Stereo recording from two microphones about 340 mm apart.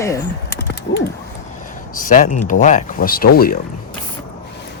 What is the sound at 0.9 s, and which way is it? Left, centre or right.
Creak, left.